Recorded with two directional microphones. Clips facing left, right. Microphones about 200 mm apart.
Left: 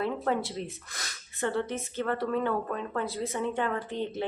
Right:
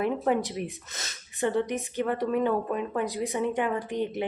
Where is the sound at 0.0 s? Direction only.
15° right (ahead or behind).